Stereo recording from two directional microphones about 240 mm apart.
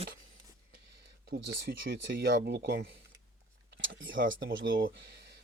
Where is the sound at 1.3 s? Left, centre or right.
Right.